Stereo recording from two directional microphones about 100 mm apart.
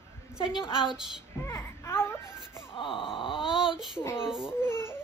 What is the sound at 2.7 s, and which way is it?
Wail, 60° left (ahead or behind).